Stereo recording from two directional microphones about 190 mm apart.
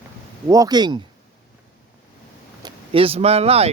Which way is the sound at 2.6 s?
30° right (ahead or behind).